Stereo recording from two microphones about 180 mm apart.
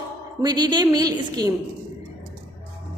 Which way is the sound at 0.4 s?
25° right (ahead or behind).